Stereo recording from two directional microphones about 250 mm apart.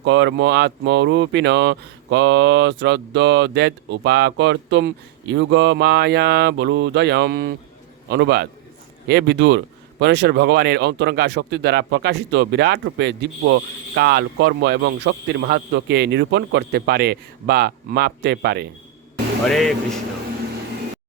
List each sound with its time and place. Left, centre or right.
0.0 s speech: right
19.5 s speech: centre